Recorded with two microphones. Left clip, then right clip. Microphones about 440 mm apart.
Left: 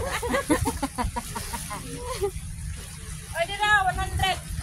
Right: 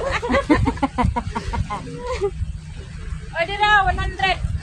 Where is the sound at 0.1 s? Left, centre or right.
Centre.